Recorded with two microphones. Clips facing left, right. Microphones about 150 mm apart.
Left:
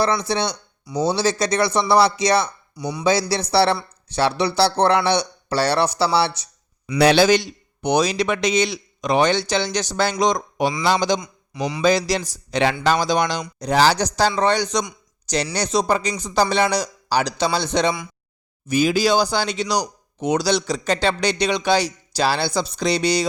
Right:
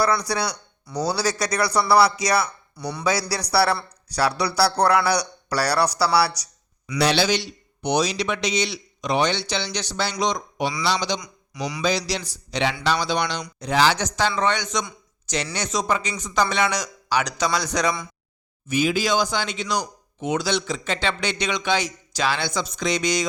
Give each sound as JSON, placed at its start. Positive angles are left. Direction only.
{"t": 0.0, "sound": "speech", "side_deg": 25}
{"t": 7.0, "sound": "a man's voice", "side_deg": 50}
{"t": 11.2, "sound": "a man's voice", "side_deg": 25}
{"t": 11.8, "sound": "a man's voice", "side_deg": 50}
{"t": 18.7, "sound": "speech", "side_deg": 40}